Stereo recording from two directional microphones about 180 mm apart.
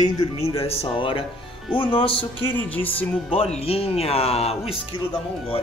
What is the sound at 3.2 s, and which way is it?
Speech, 35° left (ahead or behind).